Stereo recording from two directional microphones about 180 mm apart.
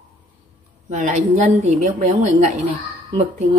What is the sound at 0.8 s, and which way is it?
A woman's voice, 40° right (ahead or behind).